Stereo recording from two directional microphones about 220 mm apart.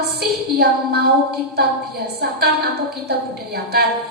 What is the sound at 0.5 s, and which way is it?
Speech, 45° right (ahead or behind).